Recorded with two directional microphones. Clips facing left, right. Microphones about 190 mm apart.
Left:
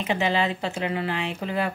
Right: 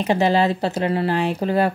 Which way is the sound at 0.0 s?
40° right (ahead or behind).